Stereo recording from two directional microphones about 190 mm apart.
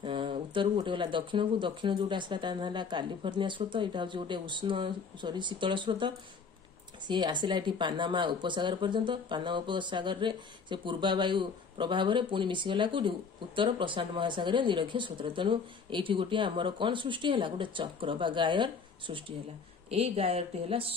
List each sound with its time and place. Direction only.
0.0 s speech: 25° right (ahead or behind)